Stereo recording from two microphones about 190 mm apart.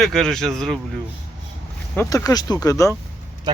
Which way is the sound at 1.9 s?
15° left (ahead or behind).